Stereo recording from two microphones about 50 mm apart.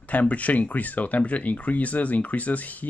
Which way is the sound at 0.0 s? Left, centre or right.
Left.